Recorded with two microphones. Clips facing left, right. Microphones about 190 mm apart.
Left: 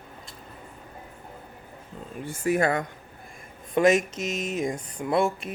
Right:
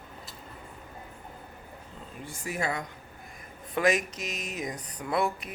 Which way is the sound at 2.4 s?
55° left (ahead or behind).